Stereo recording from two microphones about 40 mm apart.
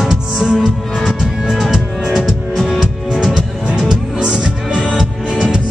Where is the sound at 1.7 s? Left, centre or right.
Centre.